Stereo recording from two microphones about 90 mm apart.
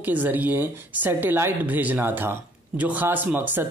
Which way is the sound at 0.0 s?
20° right (ahead or behind).